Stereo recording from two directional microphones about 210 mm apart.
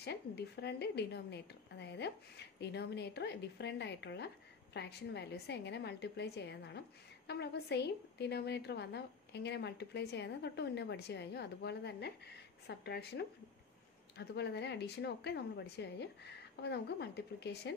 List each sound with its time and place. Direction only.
0.0 s a woman's voice: 50° left (ahead or behind)